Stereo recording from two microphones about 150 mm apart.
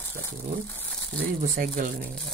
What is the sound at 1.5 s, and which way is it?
Speech, 70° right (ahead or behind).